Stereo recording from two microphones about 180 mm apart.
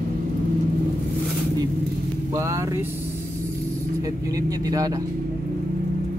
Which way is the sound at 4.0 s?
20° right (ahead or behind).